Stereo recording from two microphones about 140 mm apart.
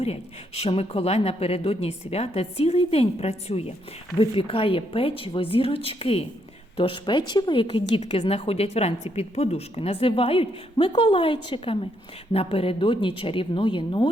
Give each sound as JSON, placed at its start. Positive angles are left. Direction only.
{"t": 0.0, "sound": "a woman's voice", "side_deg": 45}